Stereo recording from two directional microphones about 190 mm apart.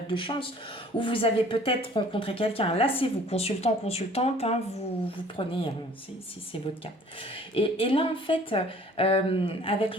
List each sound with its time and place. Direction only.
0.1 s speech: 25° left (ahead or behind)